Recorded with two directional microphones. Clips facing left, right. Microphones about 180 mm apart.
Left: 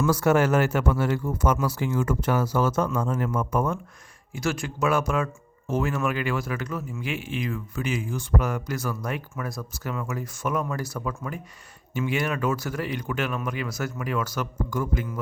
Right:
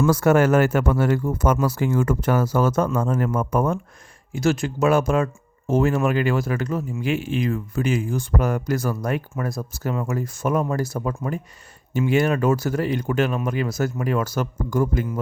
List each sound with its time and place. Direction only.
0.0 s speech: 50° right (ahead or behind)
4.4 s speech: 25° right (ahead or behind); by 6.4 s 40° right (ahead or behind)
6.4 s speech: 30° right (ahead or behind)
7.1 s speech: 45° right (ahead or behind)
9.5 s speech: 25° right (ahead or behind)